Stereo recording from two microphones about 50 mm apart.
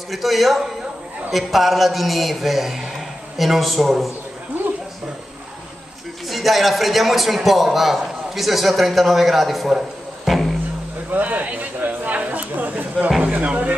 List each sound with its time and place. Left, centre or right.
0.1 s a man's voice: centre
6.2 s a man's voice: centre
11.1 s a sound: right
13.2 s speech: right